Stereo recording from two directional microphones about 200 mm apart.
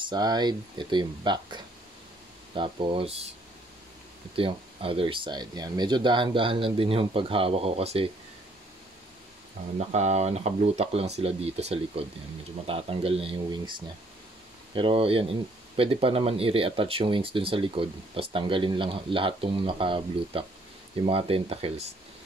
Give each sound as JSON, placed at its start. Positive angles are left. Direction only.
{"t": 0.0, "sound": "speech", "side_deg": -20}
{"t": 4.4, "sound": "speech", "side_deg": -25}
{"t": 9.8, "sound": "speech", "side_deg": -35}